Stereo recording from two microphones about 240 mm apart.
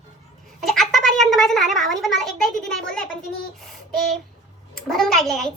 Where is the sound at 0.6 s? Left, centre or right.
Centre.